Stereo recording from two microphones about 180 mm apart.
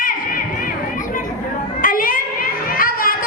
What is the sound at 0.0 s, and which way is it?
Crowd, 50° left (ahead or behind).